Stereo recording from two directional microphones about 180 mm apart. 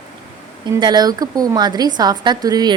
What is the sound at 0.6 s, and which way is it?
A woman's voice, 25° right (ahead or behind).